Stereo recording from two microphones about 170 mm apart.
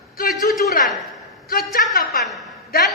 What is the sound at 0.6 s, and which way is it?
A woman's voice, 60° left (ahead or behind).